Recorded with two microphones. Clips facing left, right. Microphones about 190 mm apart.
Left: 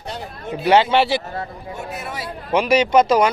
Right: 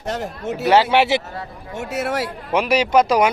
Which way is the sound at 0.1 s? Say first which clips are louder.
Right 4 dB; 90° right.